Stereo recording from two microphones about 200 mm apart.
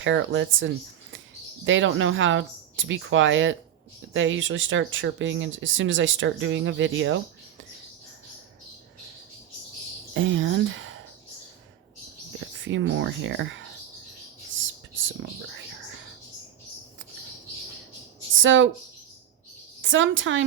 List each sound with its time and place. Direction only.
0.0 s speech: 70° right (ahead or behind)
10.2 s a sound: 75° right (ahead or behind)
12.5 s speech: 70° right (ahead or behind)
18.3 s speech: 75° right (ahead or behind)
19.8 s a woman's voice: 75° right (ahead or behind)